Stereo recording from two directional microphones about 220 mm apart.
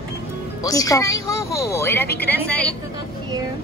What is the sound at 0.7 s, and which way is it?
A woman's voice, 15° left (ahead or behind).